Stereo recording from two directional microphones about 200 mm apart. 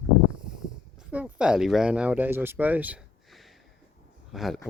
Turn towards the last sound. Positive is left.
turn(degrees=0)  # may be behind; listen again after turning